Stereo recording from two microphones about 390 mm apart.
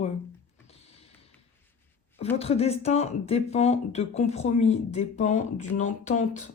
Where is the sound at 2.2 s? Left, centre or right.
Centre.